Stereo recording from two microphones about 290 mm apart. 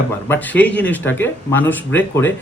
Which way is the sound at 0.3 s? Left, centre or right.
Centre.